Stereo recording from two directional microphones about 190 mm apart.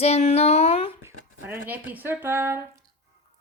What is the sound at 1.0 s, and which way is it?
Speech, 10° right (ahead or behind).